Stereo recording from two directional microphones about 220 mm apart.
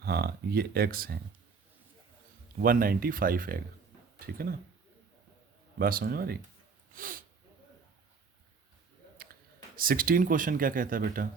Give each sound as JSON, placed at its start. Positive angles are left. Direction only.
{"t": 0.0, "sound": "speech", "side_deg": -45}
{"t": 2.6, "sound": "speech", "side_deg": -40}
{"t": 5.8, "sound": "speech", "side_deg": -40}
{"t": 9.7, "sound": "speech", "side_deg": -40}